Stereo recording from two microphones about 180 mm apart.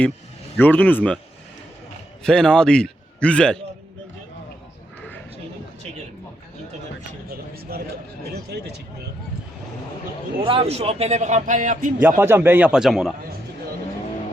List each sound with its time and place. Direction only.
0.5 s speech: 10° left (ahead or behind)
2.2 s a man's voice: 5° left (ahead or behind)
7.3 s a sound: 55° right (ahead or behind)
8.4 s speech: 65° right (ahead or behind)
10.4 s speech: 30° right (ahead or behind)
11.9 s a man's voice: 10° right (ahead or behind)